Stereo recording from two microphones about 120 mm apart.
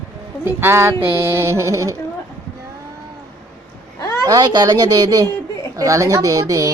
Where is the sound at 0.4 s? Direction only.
20° right (ahead or behind).